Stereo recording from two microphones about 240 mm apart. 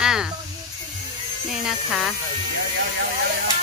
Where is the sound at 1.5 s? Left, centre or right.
Centre.